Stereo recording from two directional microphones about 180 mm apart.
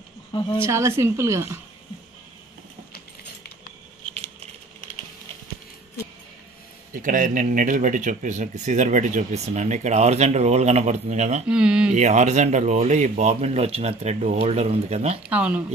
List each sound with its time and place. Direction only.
0.3 s speech: 25° left (ahead or behind)
0.7 s a woman's voice: 15° right (ahead or behind)
6.9 s speech: 45° right (ahead or behind)
11.4 s speech: 5° right (ahead or behind)
11.9 s speech: 40° right (ahead or behind)
15.2 s a woman's voice: 5° right (ahead or behind)